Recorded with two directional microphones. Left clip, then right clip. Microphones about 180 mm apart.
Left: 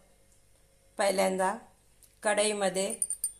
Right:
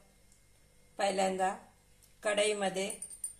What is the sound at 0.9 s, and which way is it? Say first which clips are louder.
A woman's voice: left 4 dB; 40° left (ahead or behind).